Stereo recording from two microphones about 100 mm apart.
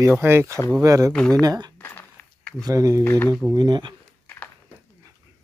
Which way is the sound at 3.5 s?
45° right (ahead or behind).